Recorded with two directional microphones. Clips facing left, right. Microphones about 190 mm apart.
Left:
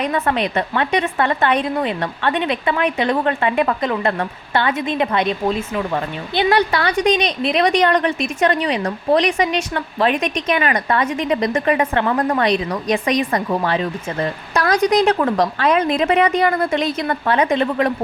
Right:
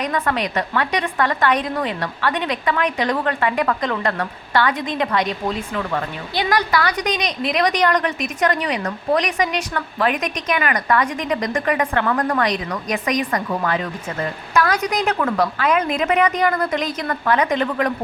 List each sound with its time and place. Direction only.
0.0 s speech: 25° left (ahead or behind)